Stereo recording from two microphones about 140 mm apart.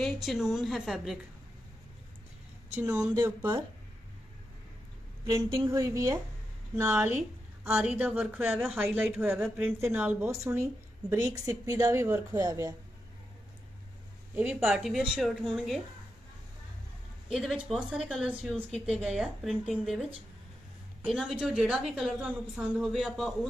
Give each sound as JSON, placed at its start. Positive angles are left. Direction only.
{"t": 0.0, "sound": "a woman's voice", "side_deg": 0}
{"t": 2.7, "sound": "speech", "side_deg": -15}
{"t": 5.7, "sound": "a woman's voice", "side_deg": -20}
{"t": 14.3, "sound": "speech", "side_deg": -15}
{"t": 14.6, "sound": "a woman's voice", "side_deg": 0}
{"t": 17.3, "sound": "a woman's voice", "side_deg": 0}